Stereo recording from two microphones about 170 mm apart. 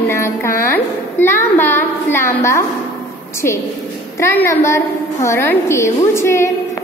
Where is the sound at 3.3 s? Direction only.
15° left (ahead or behind).